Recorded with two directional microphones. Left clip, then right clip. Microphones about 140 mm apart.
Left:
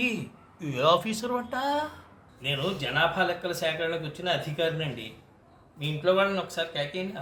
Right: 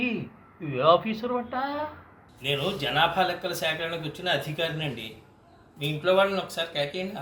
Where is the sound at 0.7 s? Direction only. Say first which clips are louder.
Right 2 dB; 15° left (ahead or behind).